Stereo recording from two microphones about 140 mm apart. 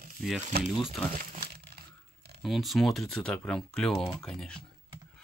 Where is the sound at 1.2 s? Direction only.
90° right.